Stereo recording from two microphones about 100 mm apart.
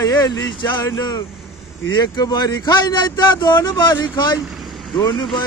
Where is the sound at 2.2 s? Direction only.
45° left (ahead or behind).